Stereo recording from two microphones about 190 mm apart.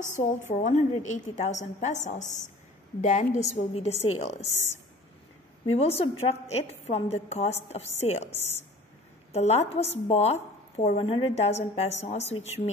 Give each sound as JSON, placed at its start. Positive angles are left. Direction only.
{"t": 0.5, "sound": "a woman's voice", "side_deg": 40}
{"t": 5.8, "sound": "a woman's voice", "side_deg": 30}